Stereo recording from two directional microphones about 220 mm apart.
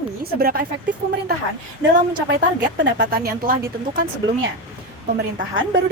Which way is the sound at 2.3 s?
50° right (ahead or behind).